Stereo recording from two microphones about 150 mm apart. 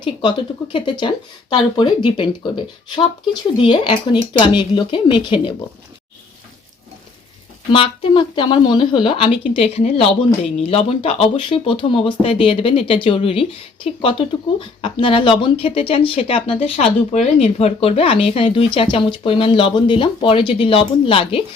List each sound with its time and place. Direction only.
0.0 s speech: 30° left (ahead or behind)
7.7 s speech: 35° left (ahead or behind)